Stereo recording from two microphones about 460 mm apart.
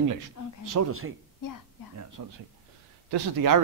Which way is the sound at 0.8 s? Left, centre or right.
Right.